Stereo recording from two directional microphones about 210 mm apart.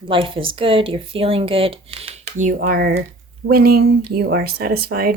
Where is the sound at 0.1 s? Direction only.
25° right (ahead or behind); by 5.1 s 45° right (ahead or behind).